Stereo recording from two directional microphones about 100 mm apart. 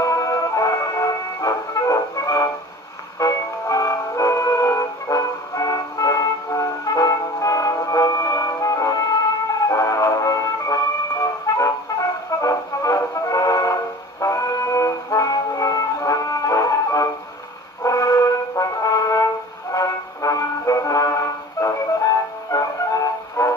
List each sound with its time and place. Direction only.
0.0 s music: 35° left (ahead or behind)